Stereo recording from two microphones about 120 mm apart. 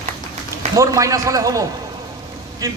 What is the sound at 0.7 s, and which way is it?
A man's voice, 25° right (ahead or behind).